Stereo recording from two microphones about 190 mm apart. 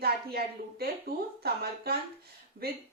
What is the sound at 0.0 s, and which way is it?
Speech, 55° right (ahead or behind).